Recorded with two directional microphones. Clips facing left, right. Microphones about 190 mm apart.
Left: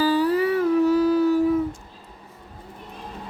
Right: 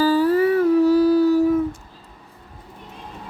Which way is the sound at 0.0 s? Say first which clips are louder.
Right 3 dB; 45° right (ahead or behind).